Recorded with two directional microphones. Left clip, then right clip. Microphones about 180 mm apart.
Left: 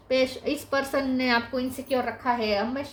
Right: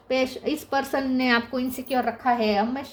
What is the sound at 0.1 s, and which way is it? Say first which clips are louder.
A woman's voice: even; 45° right (ahead or behind).